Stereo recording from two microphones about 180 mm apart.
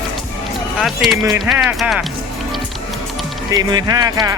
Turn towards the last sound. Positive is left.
turn(degrees=-20)  # may be behind; listen again after turning